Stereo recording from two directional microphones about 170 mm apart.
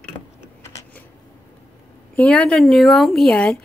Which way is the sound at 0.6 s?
15° left (ahead or behind).